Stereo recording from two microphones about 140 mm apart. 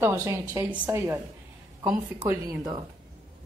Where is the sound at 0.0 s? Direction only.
20° right (ahead or behind).